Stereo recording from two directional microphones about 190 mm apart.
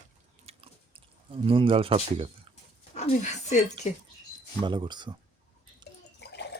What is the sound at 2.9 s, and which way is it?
Speech, 35° left (ahead or behind).